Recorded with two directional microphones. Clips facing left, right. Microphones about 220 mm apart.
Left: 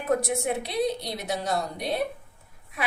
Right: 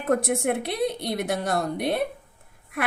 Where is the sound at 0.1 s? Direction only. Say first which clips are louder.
Right 3 dB; 55° right (ahead or behind).